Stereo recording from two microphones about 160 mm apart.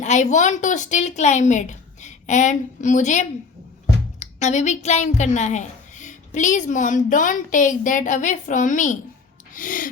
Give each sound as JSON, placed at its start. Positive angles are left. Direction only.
{"t": 0.0, "sound": "a woman's voice", "side_deg": 50}
{"t": 9.6, "sound": "gasp", "side_deg": 55}